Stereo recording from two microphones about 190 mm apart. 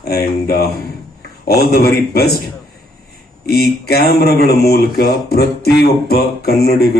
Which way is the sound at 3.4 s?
55° left (ahead or behind).